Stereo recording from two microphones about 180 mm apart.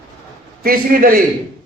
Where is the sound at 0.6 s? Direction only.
50° right (ahead or behind).